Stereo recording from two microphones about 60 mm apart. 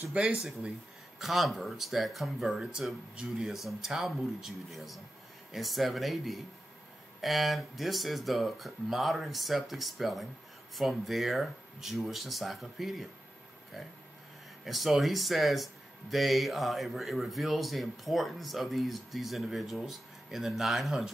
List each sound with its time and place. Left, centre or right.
0.1 s speech: centre
2.8 s speech: centre
3.2 s speech: centre
14.6 s speech: centre